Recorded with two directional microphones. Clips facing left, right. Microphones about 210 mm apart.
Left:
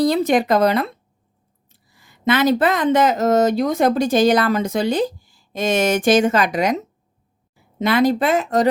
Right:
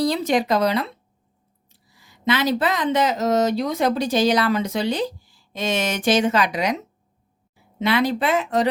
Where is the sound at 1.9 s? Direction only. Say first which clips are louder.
Left 4 dB; 55° left (ahead or behind).